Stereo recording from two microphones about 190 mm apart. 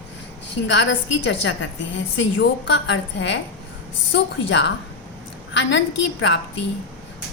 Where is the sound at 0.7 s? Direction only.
70° left (ahead or behind).